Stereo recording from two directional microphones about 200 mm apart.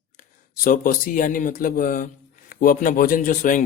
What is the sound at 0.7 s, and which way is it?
Speech, 45° left (ahead or behind).